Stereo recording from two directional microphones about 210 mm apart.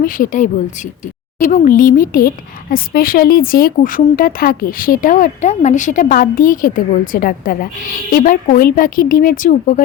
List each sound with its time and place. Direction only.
0.0 s speech: 40° left (ahead or behind)